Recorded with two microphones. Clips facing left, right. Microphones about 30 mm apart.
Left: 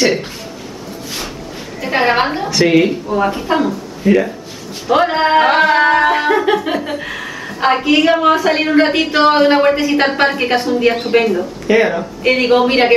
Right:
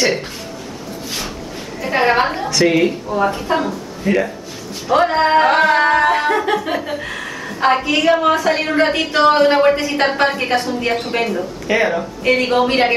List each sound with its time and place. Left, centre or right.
0.0 s speech: centre
1.9 s speech: centre
4.8 s speech: centre